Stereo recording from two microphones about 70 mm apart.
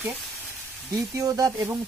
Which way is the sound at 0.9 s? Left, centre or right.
Right.